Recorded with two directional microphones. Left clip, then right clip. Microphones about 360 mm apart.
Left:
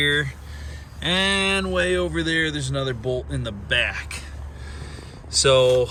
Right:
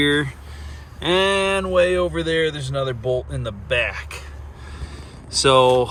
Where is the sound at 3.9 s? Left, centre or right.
Centre.